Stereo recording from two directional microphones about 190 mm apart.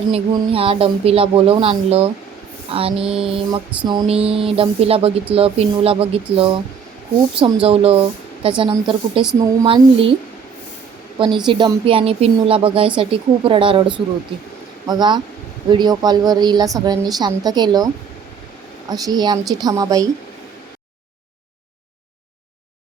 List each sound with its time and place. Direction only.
0.1 s a woman's voice: 30° right (ahead or behind)
11.3 s a woman's voice: 25° right (ahead or behind)
18.9 s a woman's voice: 20° right (ahead or behind)